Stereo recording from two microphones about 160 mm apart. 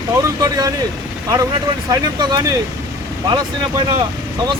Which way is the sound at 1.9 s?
25° right (ahead or behind).